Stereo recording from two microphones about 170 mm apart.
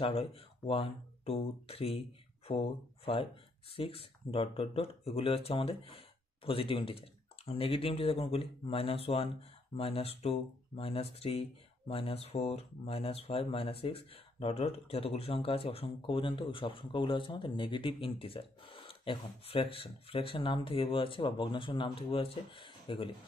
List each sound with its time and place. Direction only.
0.0 s speech: 35° left (ahead or behind)